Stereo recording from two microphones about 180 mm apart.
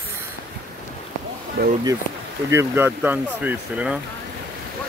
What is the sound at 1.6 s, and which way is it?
Speech, 60° right (ahead or behind).